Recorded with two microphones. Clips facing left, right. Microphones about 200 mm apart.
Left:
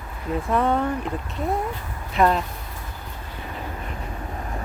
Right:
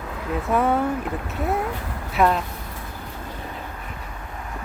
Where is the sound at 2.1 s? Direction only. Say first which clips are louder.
Even; centre (ahead or behind).